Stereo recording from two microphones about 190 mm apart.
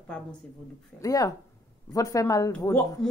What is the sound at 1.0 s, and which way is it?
Speech, 20° left (ahead or behind).